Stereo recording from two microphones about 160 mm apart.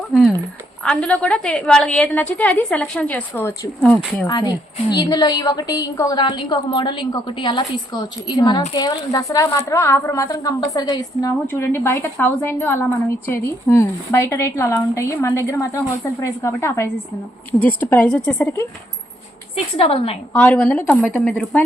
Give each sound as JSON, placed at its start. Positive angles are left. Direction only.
{"t": 0.1, "sound": "a woman's voice", "side_deg": 0}
{"t": 4.3, "sound": "a woman's voice", "side_deg": 25}
{"t": 19.7, "sound": "a woman's voice", "side_deg": 35}
{"t": 20.3, "sound": "a woman's voice", "side_deg": 10}